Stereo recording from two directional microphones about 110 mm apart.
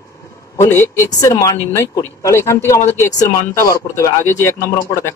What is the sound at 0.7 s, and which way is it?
Speech, 25° left (ahead or behind).